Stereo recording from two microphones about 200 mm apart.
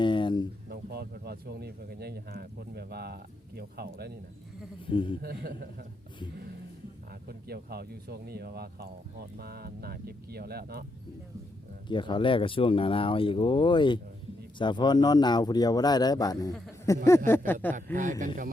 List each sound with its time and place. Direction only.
0.0 s a sound: 25° left (ahead or behind)
0.7 s speech: 55° right (ahead or behind)
4.9 s speech: 25° left (ahead or behind)
5.2 s speech: 50° right (ahead or behind)
7.1 s speech: 50° right (ahead or behind)
11.9 s speech: 25° left (ahead or behind)
17.9 s speech: 40° right (ahead or behind)